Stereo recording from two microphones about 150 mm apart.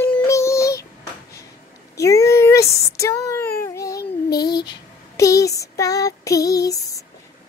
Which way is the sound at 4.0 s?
90° left.